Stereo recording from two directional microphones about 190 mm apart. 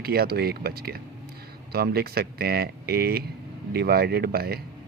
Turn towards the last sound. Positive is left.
turn(degrees=-55)  # may be behind; listen again after turning